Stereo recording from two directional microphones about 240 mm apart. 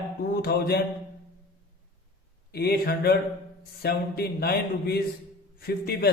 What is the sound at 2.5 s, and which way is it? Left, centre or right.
A man's voice, left.